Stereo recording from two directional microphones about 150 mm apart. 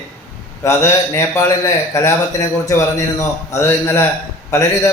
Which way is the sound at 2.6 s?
20° left (ahead or behind).